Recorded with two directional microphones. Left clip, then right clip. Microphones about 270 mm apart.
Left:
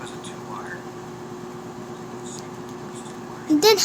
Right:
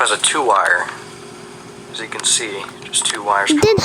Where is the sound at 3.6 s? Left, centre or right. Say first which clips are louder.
Right 3 dB; right.